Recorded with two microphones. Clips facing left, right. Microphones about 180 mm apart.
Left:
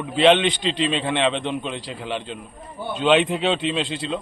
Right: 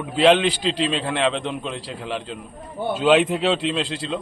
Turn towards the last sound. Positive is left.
turn(degrees=0)  # may be behind; listen again after turning